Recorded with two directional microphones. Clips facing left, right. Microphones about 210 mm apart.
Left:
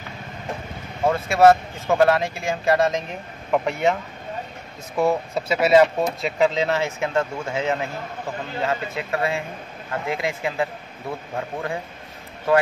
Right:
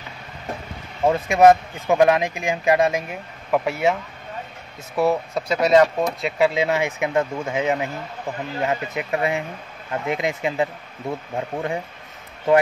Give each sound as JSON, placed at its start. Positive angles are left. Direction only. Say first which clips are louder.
{"t": 1.0, "sound": "speech", "louder": "right 1 dB", "side_deg": -15}
{"t": 4.9, "sound": "speech", "louder": "right 1 dB", "side_deg": 0}